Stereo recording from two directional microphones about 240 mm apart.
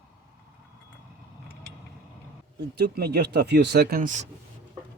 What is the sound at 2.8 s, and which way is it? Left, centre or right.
Speech, right.